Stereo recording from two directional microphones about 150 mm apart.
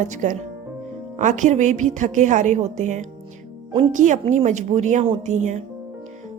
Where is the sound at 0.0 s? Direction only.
55° right (ahead or behind).